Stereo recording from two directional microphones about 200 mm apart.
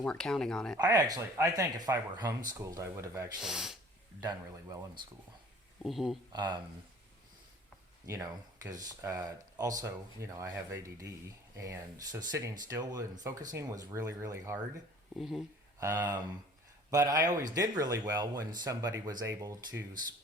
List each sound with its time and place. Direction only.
0.0 s speech: 5° left (ahead or behind)
0.8 s speech: 20° right (ahead or behind)
3.4 s speech: centre (ahead or behind)
4.2 s speech: 20° right (ahead or behind)
5.8 s speech: centre (ahead or behind)
6.3 s speech: 20° right (ahead or behind)
8.0 s speech: 15° right (ahead or behind)
15.2 s speech: centre (ahead or behind)
15.8 s speech: 15° right (ahead or behind)